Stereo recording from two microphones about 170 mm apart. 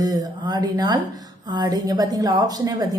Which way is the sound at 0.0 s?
20° right (ahead or behind).